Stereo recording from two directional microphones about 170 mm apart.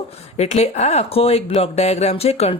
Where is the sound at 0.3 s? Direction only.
40° left (ahead or behind).